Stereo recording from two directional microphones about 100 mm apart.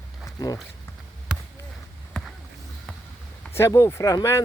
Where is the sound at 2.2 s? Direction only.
5° left (ahead or behind).